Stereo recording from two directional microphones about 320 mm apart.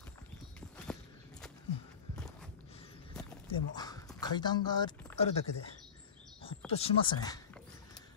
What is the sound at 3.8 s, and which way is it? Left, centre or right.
Dog, centre.